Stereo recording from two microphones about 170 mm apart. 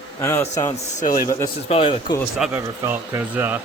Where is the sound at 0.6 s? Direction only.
45° left (ahead or behind).